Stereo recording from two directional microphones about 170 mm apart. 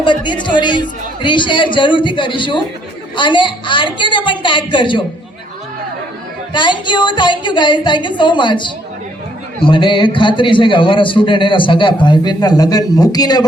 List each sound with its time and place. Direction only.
0.0 s a man's voice: 25° left (ahead or behind)
6.5 s a man's voice: 25° left (ahead or behind)